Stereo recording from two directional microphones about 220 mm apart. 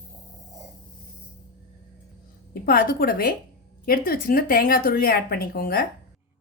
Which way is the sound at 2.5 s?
40° left (ahead or behind).